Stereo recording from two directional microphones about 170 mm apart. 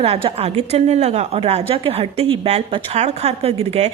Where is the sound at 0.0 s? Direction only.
35° right (ahead or behind).